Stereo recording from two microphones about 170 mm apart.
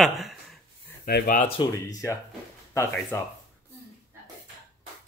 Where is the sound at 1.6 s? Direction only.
20° left (ahead or behind).